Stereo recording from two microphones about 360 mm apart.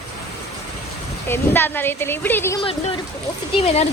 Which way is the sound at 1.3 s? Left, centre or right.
Centre.